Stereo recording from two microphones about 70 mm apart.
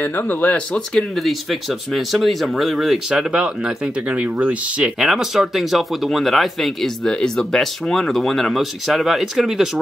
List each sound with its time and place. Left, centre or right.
0.0 s speech: left
0.7 s speech: centre
3.1 s speech: centre
4.9 s speech: centre